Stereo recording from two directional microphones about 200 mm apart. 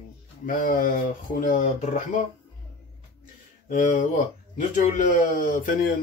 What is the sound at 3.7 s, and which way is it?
Speech, 40° left (ahead or behind).